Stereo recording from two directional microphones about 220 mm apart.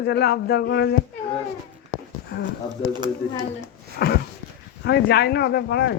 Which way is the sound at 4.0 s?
45° left (ahead or behind).